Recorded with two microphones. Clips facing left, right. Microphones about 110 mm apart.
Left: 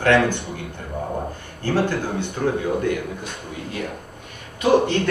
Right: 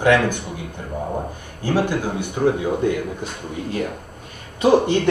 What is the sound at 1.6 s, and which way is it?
Speech, 15° right (ahead or behind).